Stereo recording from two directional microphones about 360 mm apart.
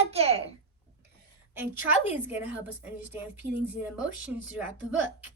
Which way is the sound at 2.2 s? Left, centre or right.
Centre.